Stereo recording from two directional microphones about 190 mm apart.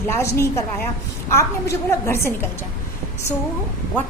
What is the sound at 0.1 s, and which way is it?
A woman's voice, 15° left (ahead or behind).